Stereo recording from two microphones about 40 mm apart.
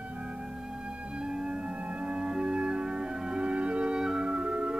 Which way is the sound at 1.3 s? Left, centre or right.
Right.